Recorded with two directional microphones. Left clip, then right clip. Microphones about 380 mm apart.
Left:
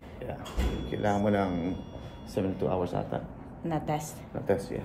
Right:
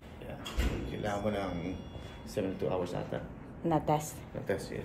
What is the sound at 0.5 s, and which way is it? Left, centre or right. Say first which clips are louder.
Music: left 3 dB; left.